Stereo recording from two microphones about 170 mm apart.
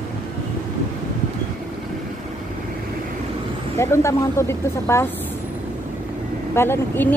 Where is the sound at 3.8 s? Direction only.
15° left (ahead or behind).